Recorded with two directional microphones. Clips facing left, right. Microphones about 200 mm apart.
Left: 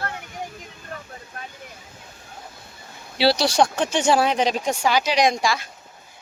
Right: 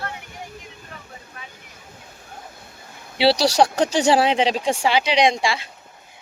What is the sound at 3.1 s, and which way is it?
Speech, 25° right (ahead or behind).